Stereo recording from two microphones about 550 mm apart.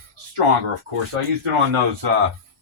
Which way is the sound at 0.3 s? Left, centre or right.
Right.